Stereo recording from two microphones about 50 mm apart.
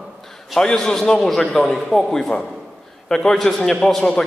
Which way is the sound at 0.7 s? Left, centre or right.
Centre.